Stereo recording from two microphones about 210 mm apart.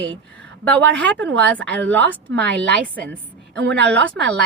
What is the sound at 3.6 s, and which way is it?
Speech, 60° right (ahead or behind).